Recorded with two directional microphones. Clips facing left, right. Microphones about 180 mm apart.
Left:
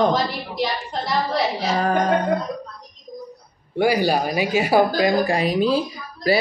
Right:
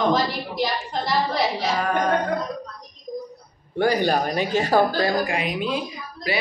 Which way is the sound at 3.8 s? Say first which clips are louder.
Left 2 dB; 10° left (ahead or behind).